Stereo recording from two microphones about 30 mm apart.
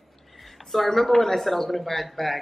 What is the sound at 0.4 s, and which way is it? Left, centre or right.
Speech, centre.